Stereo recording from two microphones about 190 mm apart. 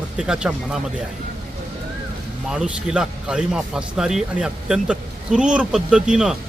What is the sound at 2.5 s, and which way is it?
Speech, 5° right (ahead or behind).